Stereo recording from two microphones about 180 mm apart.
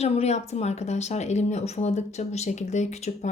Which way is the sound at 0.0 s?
35° left (ahead or behind).